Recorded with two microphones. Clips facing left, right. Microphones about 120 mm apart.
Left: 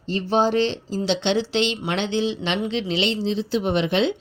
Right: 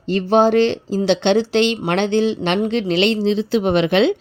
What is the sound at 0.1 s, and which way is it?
Speech, 60° right (ahead or behind).